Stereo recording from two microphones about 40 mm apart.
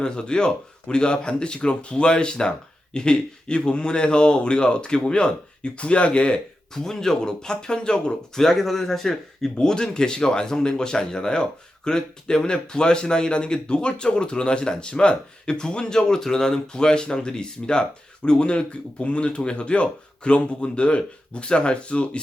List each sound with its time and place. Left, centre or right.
0.0 s speech: left
6.7 s speech: centre
8.4 s speech: centre
9.6 s speech: centre